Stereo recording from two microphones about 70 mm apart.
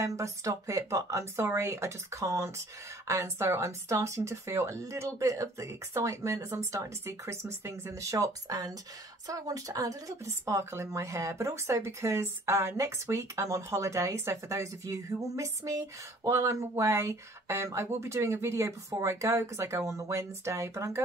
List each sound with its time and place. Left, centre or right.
0.0 s speech: right